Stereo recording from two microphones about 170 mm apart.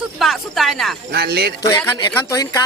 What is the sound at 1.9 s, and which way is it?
Speech, 20° left (ahead or behind).